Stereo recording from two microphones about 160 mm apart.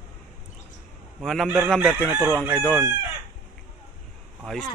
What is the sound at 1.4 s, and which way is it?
Chicken, 10° right (ahead or behind).